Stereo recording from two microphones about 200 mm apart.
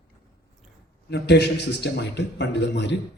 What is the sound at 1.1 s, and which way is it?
A man's voice, 55° left (ahead or behind).